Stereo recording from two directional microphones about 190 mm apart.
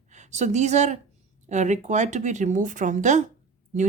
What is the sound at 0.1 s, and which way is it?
A woman's voice, 40° right (ahead or behind).